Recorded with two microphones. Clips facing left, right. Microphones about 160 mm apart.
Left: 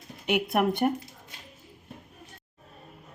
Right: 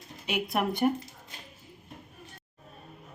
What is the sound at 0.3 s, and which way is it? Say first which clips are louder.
Speech: left 4 dB; 60° left (ahead or behind).